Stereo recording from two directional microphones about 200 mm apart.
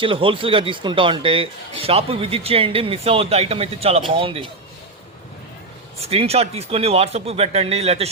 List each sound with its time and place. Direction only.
0.0 s a man's voice: 25° right (ahead or behind)
6.0 s speech: 30° right (ahead or behind)